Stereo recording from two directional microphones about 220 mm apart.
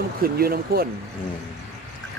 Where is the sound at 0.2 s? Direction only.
45° right (ahead or behind).